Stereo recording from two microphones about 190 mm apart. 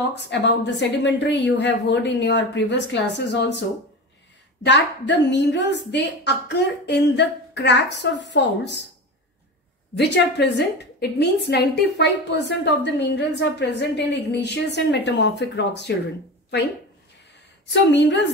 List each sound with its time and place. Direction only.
0.1 s speech: 65° left (ahead or behind)
4.6 s a woman's voice: 70° left (ahead or behind)
9.9 s a woman's voice: 65° left (ahead or behind)
17.6 s speech: 65° left (ahead or behind)